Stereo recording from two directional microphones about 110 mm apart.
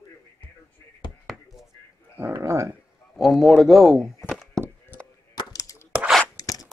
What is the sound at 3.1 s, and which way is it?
A man's voice, centre (ahead or behind).